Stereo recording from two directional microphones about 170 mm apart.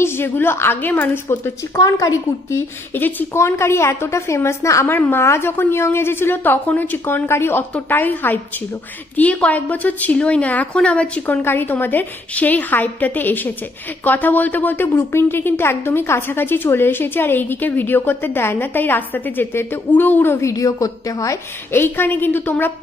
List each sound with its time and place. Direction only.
0.0 s speech: 15° left (ahead or behind)